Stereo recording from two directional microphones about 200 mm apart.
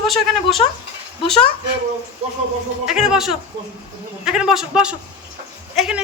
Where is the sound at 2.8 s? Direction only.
5° right (ahead or behind).